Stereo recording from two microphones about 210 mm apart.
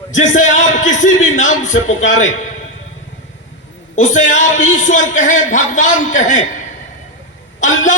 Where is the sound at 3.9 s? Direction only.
35° left (ahead or behind).